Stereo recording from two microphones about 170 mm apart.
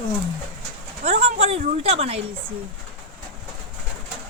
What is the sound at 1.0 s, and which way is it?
Speech, 35° right (ahead or behind).